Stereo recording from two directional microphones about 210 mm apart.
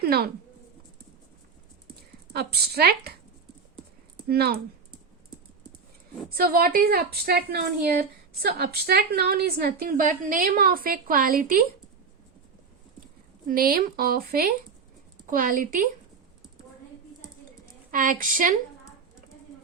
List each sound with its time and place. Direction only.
0.0 s speech: 45° right (ahead or behind)
2.3 s a woman's voice: 50° right (ahead or behind)
4.3 s a woman's voice: 50° right (ahead or behind)
6.3 s a woman's voice: 45° right (ahead or behind)
13.5 s a woman's voice: 45° right (ahead or behind)
17.9 s a woman's voice: 40° right (ahead or behind)